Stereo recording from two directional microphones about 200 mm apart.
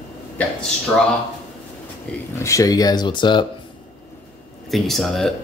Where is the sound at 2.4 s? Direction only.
15° left (ahead or behind).